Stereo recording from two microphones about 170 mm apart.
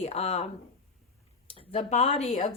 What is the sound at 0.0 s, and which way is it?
Speech, 35° left (ahead or behind).